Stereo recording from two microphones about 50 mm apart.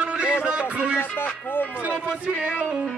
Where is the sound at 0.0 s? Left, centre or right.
Right.